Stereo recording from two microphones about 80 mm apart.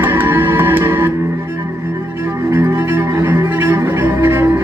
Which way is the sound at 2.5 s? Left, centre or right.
Right.